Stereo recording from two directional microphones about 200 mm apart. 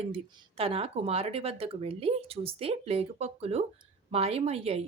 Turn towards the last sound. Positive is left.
turn(degrees=-30)  # may be behind; listen again after turning